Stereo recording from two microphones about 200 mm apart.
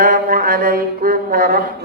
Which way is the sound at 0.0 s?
45° right (ahead or behind).